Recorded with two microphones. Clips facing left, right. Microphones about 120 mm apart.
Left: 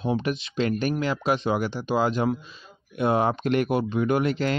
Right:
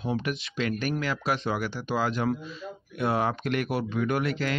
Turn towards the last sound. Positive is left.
turn(degrees=30)  # may be behind; listen again after turning